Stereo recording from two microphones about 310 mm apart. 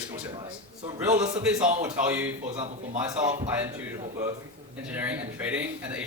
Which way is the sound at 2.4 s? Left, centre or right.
Right.